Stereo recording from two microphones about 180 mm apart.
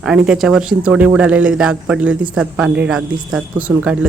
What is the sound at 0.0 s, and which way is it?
A man's voice, 5° right (ahead or behind).